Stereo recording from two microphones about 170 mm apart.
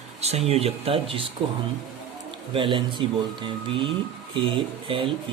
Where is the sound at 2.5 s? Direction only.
30° right (ahead or behind).